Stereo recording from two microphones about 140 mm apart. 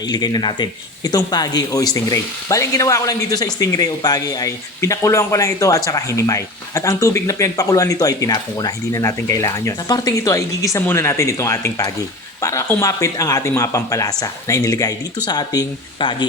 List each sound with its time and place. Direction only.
0.1 s speech: 30° left (ahead or behind)